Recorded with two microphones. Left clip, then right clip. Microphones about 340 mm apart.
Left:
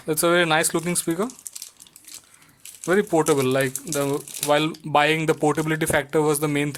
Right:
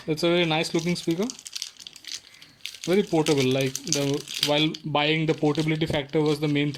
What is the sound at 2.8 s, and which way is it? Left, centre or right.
Speech, left.